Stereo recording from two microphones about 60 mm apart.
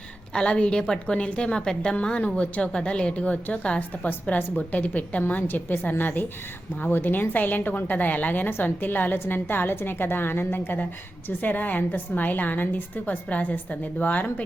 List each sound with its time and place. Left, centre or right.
0.3 s a woman's voice: centre